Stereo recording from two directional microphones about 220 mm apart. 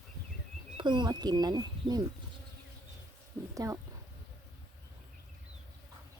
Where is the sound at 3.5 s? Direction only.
15° right (ahead or behind).